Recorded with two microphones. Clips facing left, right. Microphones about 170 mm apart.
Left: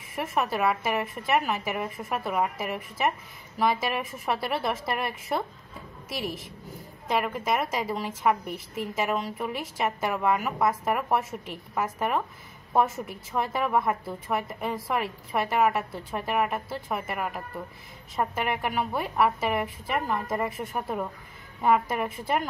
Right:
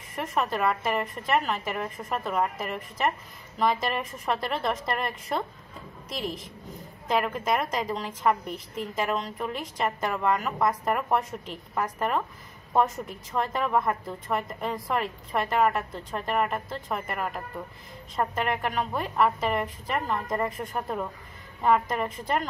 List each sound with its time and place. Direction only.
0.1 s a woman's voice: 5° left (ahead or behind)